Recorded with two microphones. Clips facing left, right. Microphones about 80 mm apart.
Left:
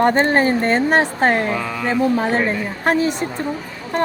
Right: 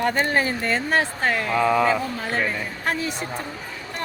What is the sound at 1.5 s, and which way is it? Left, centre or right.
Speech, centre.